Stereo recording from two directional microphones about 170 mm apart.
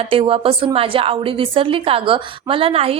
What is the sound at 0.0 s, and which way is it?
A woman's voice, 35° right (ahead or behind).